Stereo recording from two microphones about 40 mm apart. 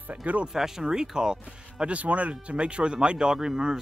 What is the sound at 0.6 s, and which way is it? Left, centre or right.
Speech, centre.